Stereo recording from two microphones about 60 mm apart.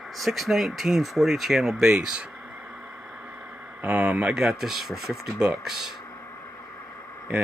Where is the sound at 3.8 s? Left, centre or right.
Right.